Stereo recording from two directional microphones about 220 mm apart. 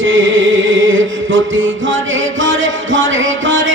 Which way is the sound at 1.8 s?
60° right (ahead or behind).